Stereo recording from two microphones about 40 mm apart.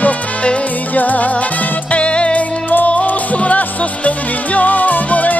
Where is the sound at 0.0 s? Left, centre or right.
Left.